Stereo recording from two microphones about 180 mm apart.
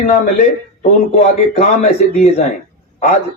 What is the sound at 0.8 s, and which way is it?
A man's voice, 40° left (ahead or behind).